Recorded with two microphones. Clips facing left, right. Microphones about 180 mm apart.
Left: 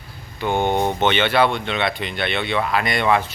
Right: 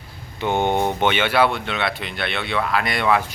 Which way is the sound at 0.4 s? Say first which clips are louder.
Even; 20° right (ahead or behind).